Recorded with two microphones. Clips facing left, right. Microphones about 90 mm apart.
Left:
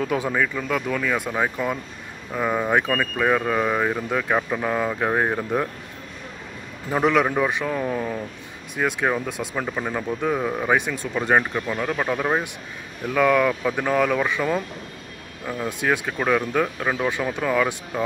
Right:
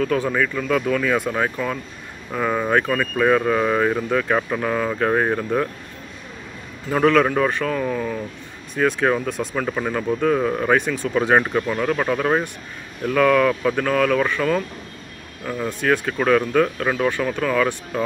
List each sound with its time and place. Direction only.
0.0 s speech: 20° left (ahead or behind)
6.9 s speech: 15° left (ahead or behind)
8.7 s speech: 10° left (ahead or behind)